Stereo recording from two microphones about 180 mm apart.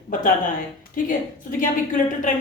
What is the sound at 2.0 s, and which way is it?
Speech, 45° left (ahead or behind).